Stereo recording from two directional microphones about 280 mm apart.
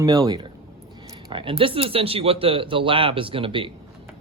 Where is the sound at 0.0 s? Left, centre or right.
Centre.